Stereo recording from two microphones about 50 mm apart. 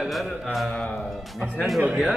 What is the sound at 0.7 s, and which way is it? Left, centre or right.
Speech, left.